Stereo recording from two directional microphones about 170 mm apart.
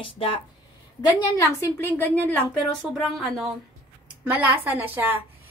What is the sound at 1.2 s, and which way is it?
A woman's voice, 20° left (ahead or behind).